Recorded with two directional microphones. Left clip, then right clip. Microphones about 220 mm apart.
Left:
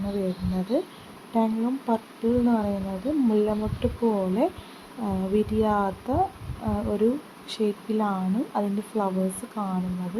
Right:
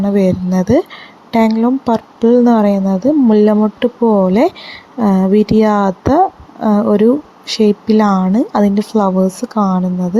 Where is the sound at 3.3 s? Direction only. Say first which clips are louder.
Right 14 dB; 40° right (ahead or behind).